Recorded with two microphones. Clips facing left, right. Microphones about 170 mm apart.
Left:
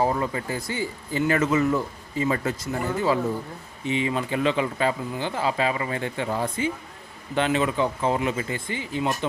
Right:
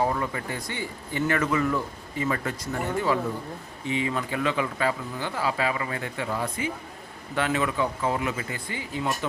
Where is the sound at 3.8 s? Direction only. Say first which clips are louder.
Left 3 dB; 20° left (ahead or behind).